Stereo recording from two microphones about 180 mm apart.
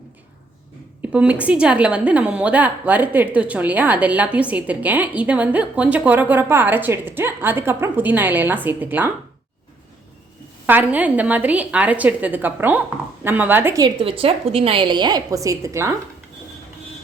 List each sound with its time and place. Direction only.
1.0 s a woman's voice: 5° right (ahead or behind)
10.7 s a woman's voice: 10° right (ahead or behind)
13.8 s a woman's voice: 30° right (ahead or behind)